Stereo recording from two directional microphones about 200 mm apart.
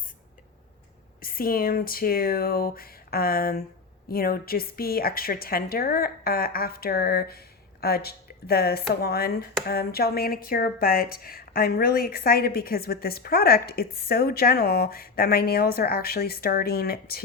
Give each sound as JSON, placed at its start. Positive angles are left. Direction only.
{"t": 1.2, "sound": "a woman's voice", "side_deg": 45}